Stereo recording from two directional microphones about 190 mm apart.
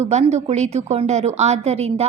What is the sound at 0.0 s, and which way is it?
A woman's voice, 35° right (ahead or behind).